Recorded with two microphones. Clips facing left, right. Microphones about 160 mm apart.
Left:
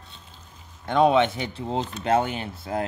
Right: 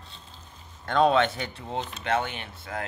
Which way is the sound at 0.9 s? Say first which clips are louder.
Left 2 dB; 15° left (ahead or behind).